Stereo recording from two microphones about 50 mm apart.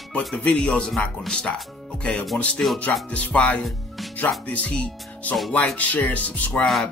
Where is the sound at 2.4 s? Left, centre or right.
Left.